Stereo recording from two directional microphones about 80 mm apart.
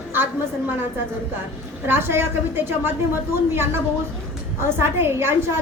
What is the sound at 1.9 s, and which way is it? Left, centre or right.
A woman's voice, right.